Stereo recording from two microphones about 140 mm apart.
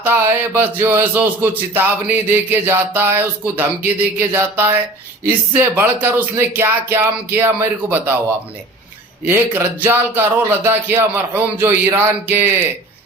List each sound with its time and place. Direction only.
0.0 s speech: 15° right (ahead or behind)
9.2 s speech: 15° right (ahead or behind)